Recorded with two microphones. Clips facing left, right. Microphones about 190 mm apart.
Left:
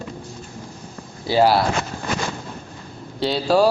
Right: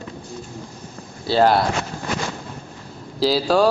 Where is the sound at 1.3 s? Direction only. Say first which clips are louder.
Even; 10° left (ahead or behind).